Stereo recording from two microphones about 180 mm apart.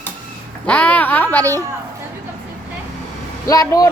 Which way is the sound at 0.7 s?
10° left (ahead or behind).